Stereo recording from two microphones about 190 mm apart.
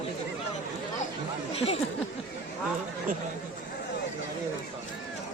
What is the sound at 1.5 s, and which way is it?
Speech, 35° left (ahead or behind).